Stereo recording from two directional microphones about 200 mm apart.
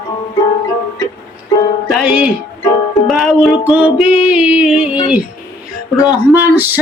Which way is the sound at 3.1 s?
Centre (ahead or behind).